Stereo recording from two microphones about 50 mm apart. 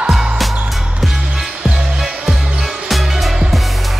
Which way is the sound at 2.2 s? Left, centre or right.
Centre.